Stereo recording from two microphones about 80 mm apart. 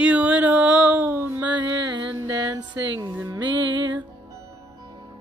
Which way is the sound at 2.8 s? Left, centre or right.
Right.